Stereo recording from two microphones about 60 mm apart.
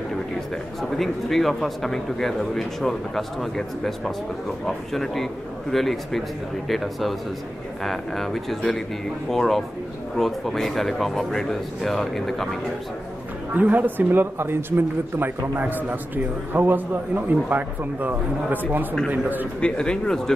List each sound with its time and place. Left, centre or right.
0.9 s a man's voice: centre
13.6 s a man's voice: right
19.6 s speech: centre